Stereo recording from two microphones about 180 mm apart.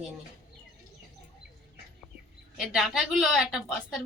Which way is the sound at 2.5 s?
Centre (ahead or behind).